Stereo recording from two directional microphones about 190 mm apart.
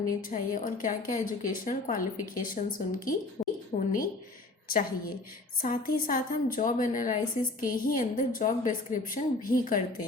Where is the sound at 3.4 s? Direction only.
35° left (ahead or behind).